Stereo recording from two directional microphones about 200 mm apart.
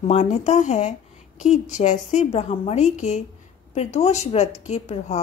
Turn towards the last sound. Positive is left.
turn(degrees=35)  # may be behind; listen again after turning